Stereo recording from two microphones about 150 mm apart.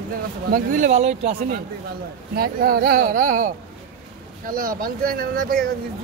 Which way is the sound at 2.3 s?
85° right.